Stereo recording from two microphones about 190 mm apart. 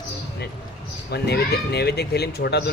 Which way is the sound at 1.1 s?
60° left (ahead or behind).